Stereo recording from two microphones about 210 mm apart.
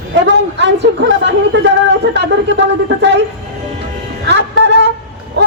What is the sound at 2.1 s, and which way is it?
A woman's voice, 55° right (ahead or behind).